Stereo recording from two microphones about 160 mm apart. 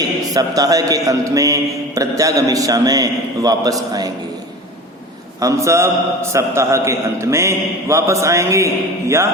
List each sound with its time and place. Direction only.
0.3 s a man's voice: 25° right (ahead or behind)
5.4 s a man's voice: 20° right (ahead or behind)